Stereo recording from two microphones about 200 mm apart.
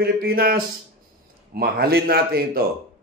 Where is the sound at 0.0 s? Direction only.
50° right (ahead or behind).